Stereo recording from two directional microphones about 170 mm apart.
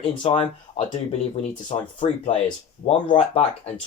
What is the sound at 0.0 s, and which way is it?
Speech, 30° left (ahead or behind).